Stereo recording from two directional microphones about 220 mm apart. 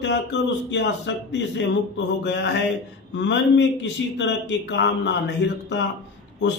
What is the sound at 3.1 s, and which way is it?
A man's voice, 55° left (ahead or behind).